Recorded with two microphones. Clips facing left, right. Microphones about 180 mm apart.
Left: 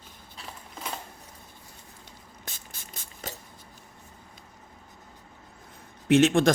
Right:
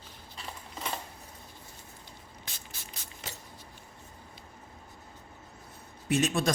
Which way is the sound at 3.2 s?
45° left (ahead or behind).